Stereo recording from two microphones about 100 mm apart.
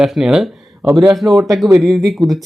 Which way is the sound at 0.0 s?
5° right (ahead or behind).